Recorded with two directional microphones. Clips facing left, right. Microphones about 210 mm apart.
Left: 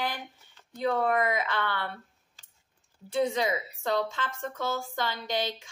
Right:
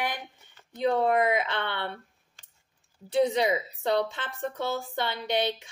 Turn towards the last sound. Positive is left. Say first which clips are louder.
# right 4 dB
turn(degrees=-65)  # may be behind; listen again after turning